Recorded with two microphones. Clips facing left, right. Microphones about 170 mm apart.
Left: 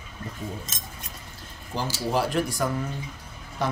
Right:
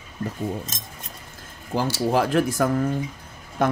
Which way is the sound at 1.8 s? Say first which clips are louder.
Right 4 dB; 60° right (ahead or behind).